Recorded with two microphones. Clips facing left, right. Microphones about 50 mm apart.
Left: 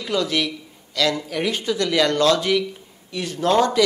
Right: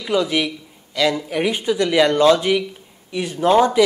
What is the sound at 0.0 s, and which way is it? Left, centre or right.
Speech, centre.